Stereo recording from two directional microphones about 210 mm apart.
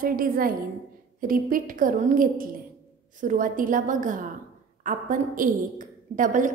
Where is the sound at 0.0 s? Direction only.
45° right (ahead or behind).